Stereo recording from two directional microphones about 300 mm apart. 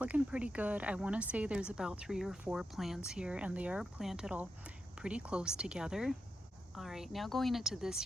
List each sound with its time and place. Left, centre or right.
0.0 s speech: centre